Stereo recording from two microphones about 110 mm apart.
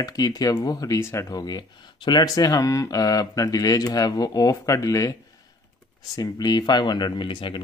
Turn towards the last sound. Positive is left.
turn(degrees=45)  # may be behind; listen again after turning